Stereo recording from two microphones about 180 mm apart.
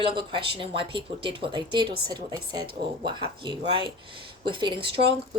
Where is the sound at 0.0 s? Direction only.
25° right (ahead or behind).